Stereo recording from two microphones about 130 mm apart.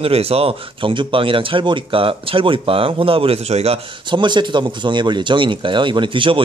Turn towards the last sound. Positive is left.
turn(degrees=-40)  # may be behind; listen again after turning